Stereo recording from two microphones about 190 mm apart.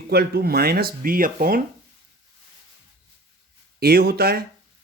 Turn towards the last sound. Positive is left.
turn(degrees=-55)  # may be behind; listen again after turning